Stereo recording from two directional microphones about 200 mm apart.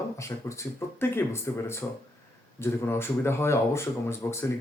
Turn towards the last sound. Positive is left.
turn(degrees=15)  # may be behind; listen again after turning